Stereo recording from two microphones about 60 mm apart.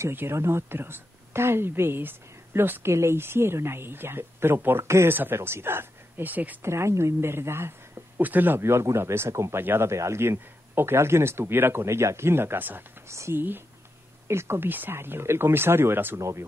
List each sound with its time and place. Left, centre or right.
0.3 s speech: right
6.6 s speech: right
8.2 s speech: right
8.5 s speech: right
9.6 s speech: right
9.8 s speech: right
13.1 s speech: right
14.2 s speech: right
16.2 s speech: right